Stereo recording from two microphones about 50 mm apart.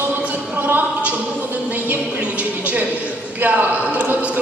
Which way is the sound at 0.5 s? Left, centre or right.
Right.